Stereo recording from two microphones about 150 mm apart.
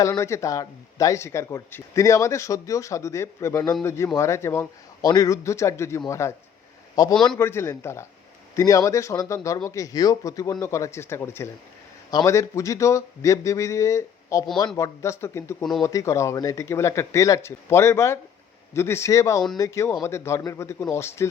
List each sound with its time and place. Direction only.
0.0 s a man's voice: 20° left (ahead or behind)